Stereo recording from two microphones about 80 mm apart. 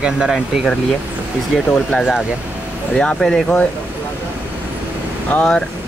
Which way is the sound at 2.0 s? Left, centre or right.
Centre.